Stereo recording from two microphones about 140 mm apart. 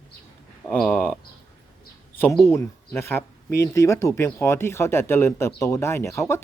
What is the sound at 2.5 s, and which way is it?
Speech, 15° left (ahead or behind).